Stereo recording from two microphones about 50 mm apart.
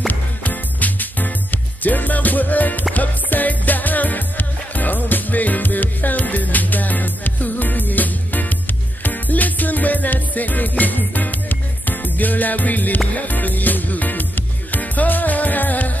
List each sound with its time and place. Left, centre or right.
0.1 s music: left